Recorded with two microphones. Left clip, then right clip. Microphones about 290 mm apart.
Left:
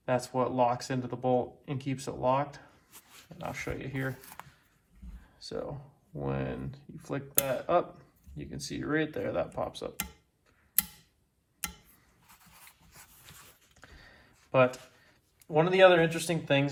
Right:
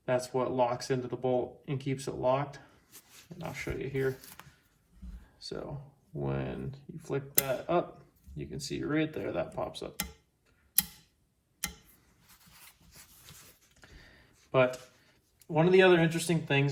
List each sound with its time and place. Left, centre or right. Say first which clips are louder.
0.0 s speech: left 1 dB; left
12.9 s writing: left 1 dB; centre
15.4 s speech: left 2 dB; left